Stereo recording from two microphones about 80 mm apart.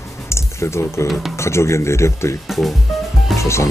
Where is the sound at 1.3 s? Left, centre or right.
Left.